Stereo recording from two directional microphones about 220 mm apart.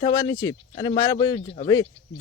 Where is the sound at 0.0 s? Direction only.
20° left (ahead or behind).